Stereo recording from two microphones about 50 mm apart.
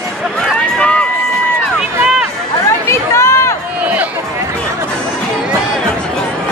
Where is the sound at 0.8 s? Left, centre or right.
Left.